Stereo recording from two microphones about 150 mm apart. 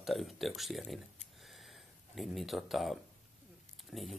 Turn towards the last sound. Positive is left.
turn(degrees=0)  # may be behind; listen again after turning